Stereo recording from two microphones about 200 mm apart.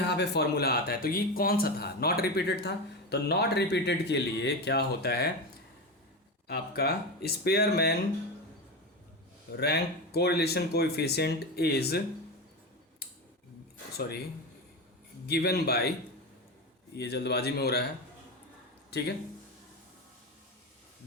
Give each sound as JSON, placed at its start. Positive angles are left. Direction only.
{"t": 0.1, "sound": "speech", "side_deg": 55}
{"t": 6.5, "sound": "speech", "side_deg": 50}
{"t": 9.5, "sound": "speech", "side_deg": 55}
{"t": 15.3, "sound": "speech", "side_deg": 50}
{"t": 16.9, "sound": "speech", "side_deg": 55}
{"t": 18.9, "sound": "speech", "side_deg": 55}